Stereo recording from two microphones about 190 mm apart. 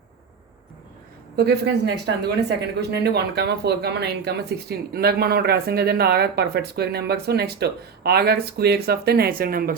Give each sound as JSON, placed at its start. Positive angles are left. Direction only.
{"t": 1.4, "sound": "speech", "side_deg": -60}